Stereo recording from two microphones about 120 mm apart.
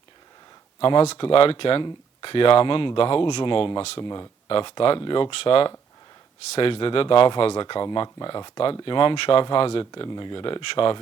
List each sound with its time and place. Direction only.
0.8 s speech: 50° left (ahead or behind)